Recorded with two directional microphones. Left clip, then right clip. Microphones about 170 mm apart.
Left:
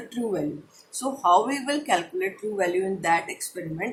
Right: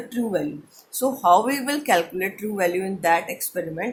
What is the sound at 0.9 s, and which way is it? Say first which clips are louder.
Speech: right 3 dB; 45° right (ahead or behind).